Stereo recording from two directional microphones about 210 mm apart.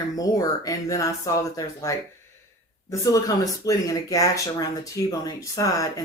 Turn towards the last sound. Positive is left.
turn(degrees=15)  # may be behind; listen again after turning